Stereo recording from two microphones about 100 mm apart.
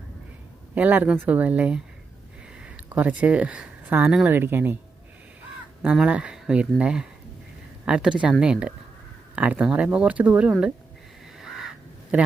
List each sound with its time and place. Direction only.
0.8 s speech: 15° right (ahead or behind)
5.8 s speech: 10° right (ahead or behind)
11.3 s crow: 5° right (ahead or behind)